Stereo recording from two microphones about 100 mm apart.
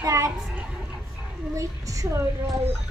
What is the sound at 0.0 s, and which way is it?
Children playing, 30° right (ahead or behind).